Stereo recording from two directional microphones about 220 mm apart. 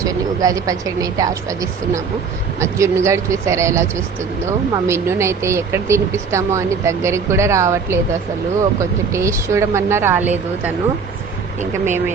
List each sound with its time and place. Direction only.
0.0 s speech: 15° right (ahead or behind)